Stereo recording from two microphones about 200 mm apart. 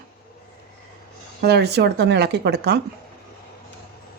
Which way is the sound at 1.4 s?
55° right (ahead or behind).